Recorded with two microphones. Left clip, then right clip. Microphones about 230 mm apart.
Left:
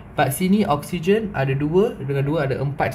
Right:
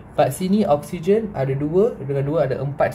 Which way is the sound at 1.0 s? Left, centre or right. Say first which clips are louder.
Right 1 dB; left.